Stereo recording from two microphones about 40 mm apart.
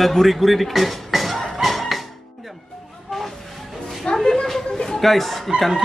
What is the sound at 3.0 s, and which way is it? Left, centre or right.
Vehicle, centre.